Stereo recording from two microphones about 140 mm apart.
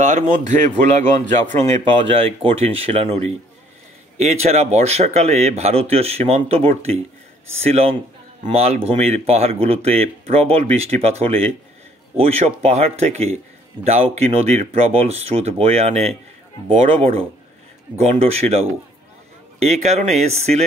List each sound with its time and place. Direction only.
0.0 s speech: 60° right (ahead or behind)
1.6 s speech: 45° right (ahead or behind)